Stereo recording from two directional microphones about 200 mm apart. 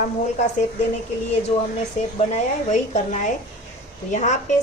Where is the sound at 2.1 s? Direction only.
35° left (ahead or behind).